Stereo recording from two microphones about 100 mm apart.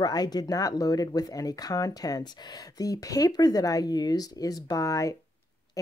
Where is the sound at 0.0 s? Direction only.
40° left (ahead or behind).